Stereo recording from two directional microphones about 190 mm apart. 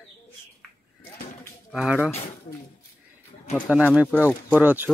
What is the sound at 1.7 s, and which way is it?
Speech, 5° right (ahead or behind).